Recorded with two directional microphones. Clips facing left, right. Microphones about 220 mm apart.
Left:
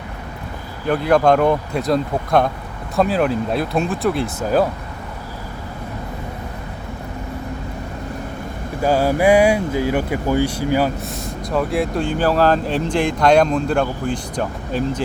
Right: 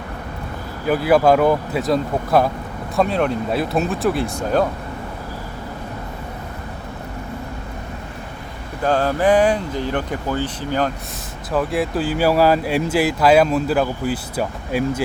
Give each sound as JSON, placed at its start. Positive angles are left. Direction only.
{"t": 0.9, "sound": "speech", "side_deg": -5}
{"t": 8.8, "sound": "speech", "side_deg": 10}
{"t": 11.5, "sound": "speech", "side_deg": 0}